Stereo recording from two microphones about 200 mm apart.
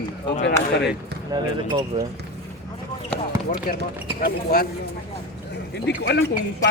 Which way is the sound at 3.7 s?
45° left (ahead or behind).